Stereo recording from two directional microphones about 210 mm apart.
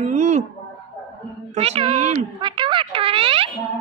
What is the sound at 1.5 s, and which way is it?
Speech, 30° right (ahead or behind).